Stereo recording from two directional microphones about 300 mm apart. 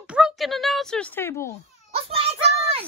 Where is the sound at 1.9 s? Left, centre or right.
Centre.